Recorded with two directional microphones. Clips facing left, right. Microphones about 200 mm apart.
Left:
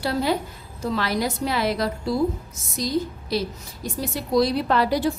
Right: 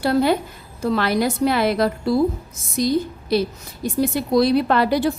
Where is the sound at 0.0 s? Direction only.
55° right (ahead or behind).